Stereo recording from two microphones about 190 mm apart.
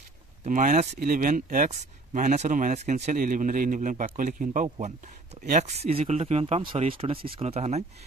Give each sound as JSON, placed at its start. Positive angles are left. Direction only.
{"t": 0.4, "sound": "speech", "side_deg": -40}